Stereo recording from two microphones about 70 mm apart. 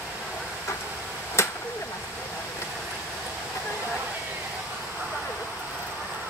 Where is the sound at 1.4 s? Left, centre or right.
Left.